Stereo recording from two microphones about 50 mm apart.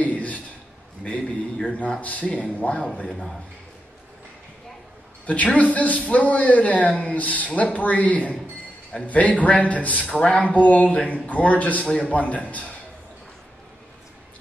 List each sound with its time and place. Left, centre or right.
0.0 s a sound: left
2.0 s a man's voice: left
5.2 s a man's voice: left